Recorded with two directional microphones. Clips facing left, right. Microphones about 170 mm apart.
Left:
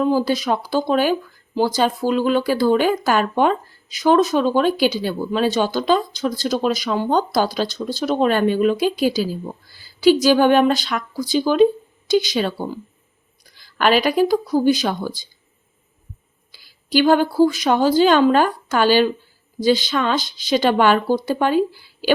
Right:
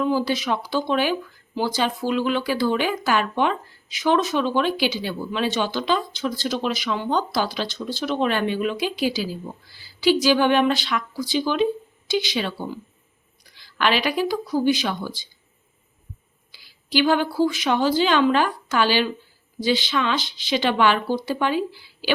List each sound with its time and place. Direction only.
0.0 s speech: 40° left (ahead or behind)
16.5 s a woman's voice: 45° left (ahead or behind)